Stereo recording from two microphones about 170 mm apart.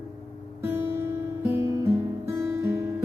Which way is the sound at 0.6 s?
15° right (ahead or behind).